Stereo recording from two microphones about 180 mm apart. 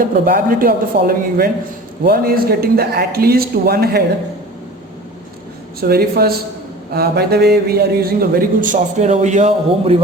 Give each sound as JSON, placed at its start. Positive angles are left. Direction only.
{"t": 0.0, "sound": "speech", "side_deg": -50}
{"t": 5.9, "sound": "speech", "side_deg": -60}